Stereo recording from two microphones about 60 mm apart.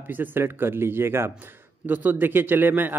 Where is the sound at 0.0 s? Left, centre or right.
Right.